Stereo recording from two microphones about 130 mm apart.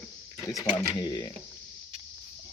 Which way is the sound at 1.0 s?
30° left (ahead or behind).